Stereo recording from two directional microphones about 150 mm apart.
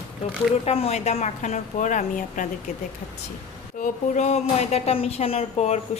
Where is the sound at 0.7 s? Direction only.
40° left (ahead or behind).